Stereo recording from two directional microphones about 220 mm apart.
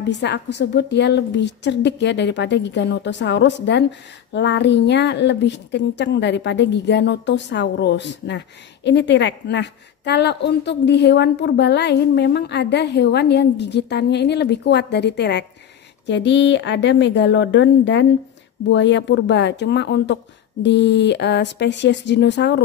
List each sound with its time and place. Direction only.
0.0 s a woman's voice: 50° left (ahead or behind)